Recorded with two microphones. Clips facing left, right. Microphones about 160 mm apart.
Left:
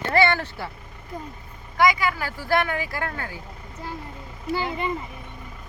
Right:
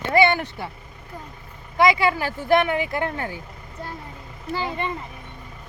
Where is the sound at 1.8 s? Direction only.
25° right (ahead or behind).